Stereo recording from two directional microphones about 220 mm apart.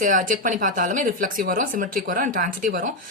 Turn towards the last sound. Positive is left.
turn(degrees=-40)  # may be behind; listen again after turning